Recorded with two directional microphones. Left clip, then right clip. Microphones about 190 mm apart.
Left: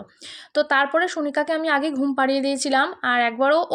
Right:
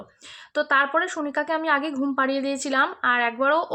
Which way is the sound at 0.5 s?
20° left (ahead or behind).